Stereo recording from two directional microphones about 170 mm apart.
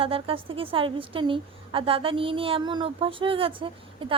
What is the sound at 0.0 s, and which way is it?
A woman's voice, 30° right (ahead or behind).